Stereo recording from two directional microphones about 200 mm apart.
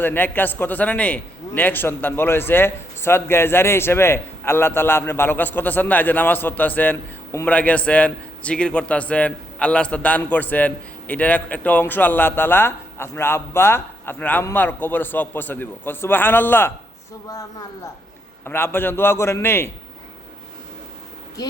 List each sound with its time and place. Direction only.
0.0 s a man's voice: 10° left (ahead or behind)